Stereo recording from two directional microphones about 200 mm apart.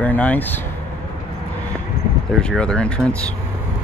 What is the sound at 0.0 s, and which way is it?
Speech, 5° left (ahead or behind).